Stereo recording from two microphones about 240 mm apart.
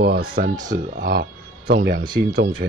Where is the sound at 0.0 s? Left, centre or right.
Right.